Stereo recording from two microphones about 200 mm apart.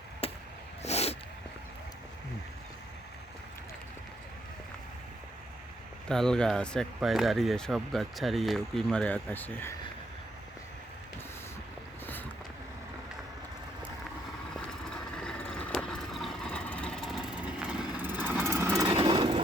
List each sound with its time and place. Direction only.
0.2 s a sound: 30° left (ahead or behind)
6.1 s speech: 5° left (ahead or behind)
14.5 s vehicle: 5° left (ahead or behind); by 19.4 s 25° right (ahead or behind)